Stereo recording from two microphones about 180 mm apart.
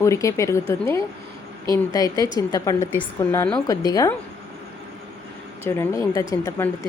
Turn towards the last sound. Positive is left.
turn(degrees=15)  # may be behind; listen again after turning